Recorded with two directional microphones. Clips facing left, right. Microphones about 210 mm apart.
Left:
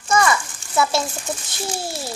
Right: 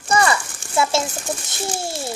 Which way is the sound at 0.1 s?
30° right (ahead or behind).